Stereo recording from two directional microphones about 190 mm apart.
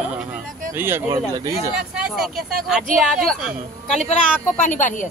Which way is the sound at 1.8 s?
5° right (ahead or behind).